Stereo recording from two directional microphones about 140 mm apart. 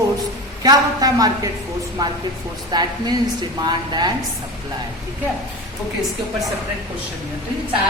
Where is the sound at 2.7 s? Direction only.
30° right (ahead or behind).